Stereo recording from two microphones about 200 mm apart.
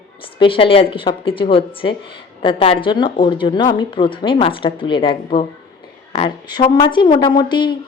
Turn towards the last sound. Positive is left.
turn(degrees=25)  # may be behind; listen again after turning